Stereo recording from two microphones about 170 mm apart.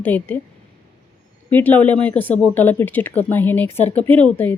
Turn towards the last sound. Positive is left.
turn(degrees=10)  # may be behind; listen again after turning